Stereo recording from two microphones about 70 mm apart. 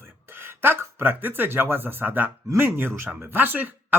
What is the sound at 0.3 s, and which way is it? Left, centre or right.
Speech, right.